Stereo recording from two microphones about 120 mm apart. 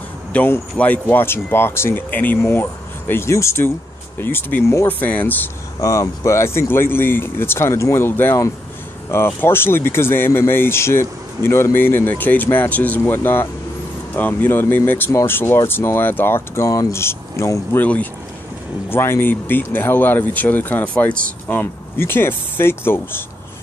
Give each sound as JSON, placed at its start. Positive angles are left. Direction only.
{"t": 0.3, "sound": "speech", "side_deg": 15}
{"t": 5.8, "sound": "speech", "side_deg": 25}
{"t": 18.9, "sound": "speech", "side_deg": 20}